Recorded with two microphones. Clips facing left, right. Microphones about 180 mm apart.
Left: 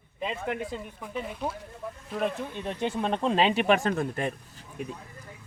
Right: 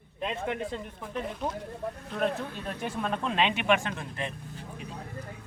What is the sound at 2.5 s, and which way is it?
Speech, 30° left (ahead or behind).